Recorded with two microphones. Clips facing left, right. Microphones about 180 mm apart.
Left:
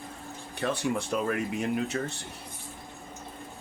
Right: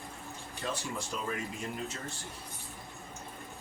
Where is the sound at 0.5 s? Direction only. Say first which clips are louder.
Left 9 dB; 65° left (ahead or behind).